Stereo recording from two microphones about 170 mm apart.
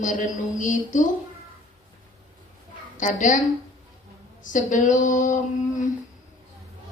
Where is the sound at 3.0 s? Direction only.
50° left (ahead or behind).